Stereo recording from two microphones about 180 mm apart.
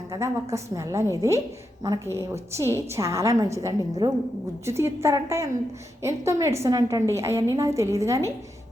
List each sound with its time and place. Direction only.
0.1 s a woman's voice: 15° right (ahead or behind)